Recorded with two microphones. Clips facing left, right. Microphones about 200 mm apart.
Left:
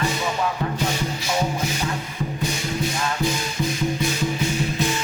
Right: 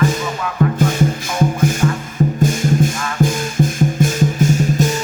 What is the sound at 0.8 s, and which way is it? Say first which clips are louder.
Music: right 8 dB; 50° right (ahead or behind).